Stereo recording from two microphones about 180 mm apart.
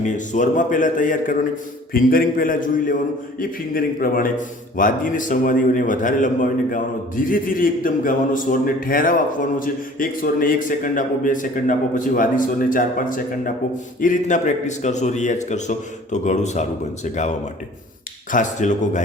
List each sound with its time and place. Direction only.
0.0 s a man's voice: 45° left (ahead or behind)
18.3 s a man's voice: 45° left (ahead or behind)